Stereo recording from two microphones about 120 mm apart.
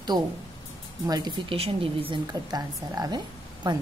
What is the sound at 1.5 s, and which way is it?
Speech, 55° right (ahead or behind).